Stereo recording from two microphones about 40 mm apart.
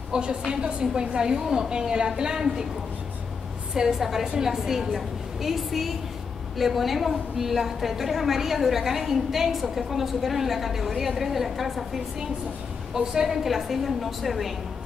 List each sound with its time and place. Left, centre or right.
0.1 s a woman's voice: right
3.7 s a woman's voice: centre
12.9 s a woman's voice: centre